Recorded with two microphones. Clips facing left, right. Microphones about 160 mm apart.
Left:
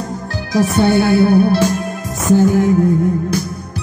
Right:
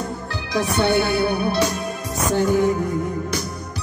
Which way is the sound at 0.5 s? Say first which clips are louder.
Left 6 dB; 45° left (ahead or behind).